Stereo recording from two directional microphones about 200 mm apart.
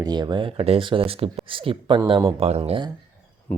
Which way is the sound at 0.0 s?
20° right (ahead or behind).